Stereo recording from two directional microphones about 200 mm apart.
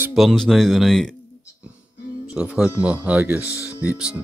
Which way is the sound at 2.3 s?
5° right (ahead or behind).